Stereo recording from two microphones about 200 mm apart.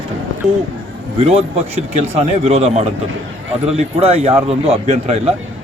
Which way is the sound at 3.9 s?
30° right (ahead or behind).